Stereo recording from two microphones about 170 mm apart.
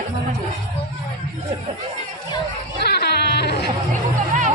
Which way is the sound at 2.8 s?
75° left (ahead or behind).